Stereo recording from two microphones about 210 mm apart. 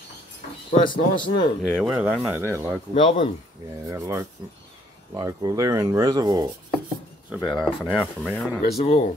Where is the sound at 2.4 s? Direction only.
15° right (ahead or behind).